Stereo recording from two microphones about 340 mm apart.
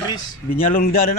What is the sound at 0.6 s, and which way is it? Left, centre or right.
Speech, left.